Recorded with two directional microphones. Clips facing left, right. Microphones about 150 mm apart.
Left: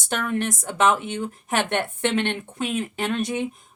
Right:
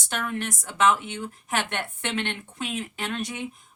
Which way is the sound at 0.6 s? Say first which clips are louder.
Even; 50° left (ahead or behind).